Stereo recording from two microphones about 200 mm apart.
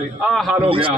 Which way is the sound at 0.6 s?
25° right (ahead or behind).